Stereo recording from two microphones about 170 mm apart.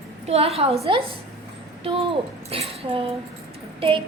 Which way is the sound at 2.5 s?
35° right (ahead or behind).